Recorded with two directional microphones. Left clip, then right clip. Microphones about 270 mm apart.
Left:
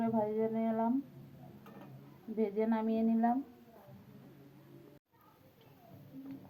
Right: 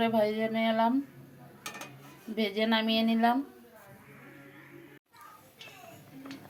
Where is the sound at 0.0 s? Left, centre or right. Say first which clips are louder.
Right 6 dB; right.